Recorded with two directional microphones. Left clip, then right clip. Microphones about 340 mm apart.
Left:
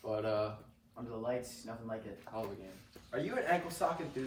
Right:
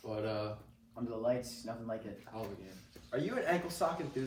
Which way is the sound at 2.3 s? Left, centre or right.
Centre.